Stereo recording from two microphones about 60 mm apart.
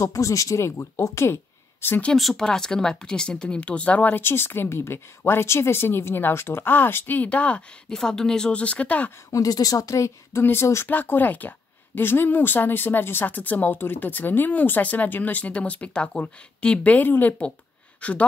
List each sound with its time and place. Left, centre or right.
0.0 s speech: left
2.1 s speech: centre; by 4.1 s left
4.1 s speech: left
7.2 s speech: left
7.9 s speech: centre; by 9.1 s left
9.3 s speech: left
10.4 s speech: left
10.9 s speech: left
18.0 s speech: left